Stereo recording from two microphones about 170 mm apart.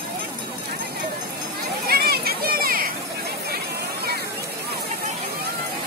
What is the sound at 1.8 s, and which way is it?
Children playing, 65° right (ahead or behind).